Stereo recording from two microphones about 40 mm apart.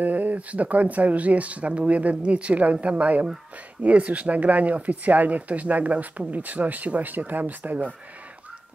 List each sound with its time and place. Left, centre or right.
0.0 s speech: right